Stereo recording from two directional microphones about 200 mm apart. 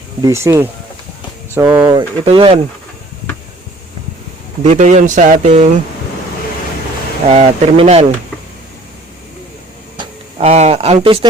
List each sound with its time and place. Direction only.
0.2 s speech: 15° right (ahead or behind)
2.2 s speech: 25° right (ahead or behind)
4.6 s speech: 35° right (ahead or behind)
7.3 s speech: 35° right (ahead or behind)
10.0 s speech: 30° right (ahead or behind)